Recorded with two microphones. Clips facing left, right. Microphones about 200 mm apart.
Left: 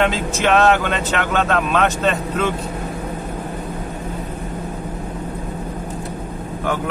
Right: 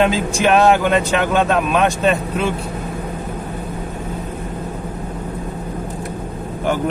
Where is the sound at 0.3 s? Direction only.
10° right (ahead or behind).